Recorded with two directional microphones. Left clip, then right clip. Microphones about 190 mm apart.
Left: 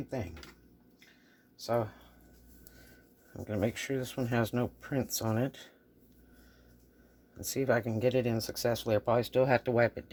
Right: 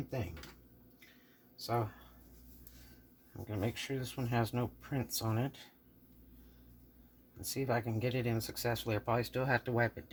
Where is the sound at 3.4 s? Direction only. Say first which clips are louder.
Left 6 dB; 50° left (ahead or behind).